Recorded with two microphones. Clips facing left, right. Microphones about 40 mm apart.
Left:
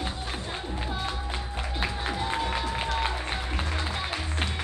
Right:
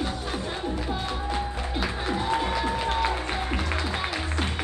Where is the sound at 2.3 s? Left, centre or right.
Right.